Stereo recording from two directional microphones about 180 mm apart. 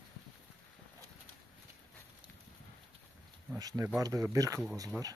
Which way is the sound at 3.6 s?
20° right (ahead or behind).